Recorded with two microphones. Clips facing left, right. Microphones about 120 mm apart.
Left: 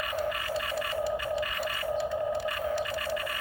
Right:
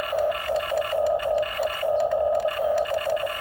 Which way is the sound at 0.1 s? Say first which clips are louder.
Right 9 dB; 45° right (ahead or behind).